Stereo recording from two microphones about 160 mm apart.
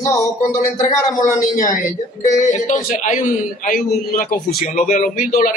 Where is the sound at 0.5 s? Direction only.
20° left (ahead or behind).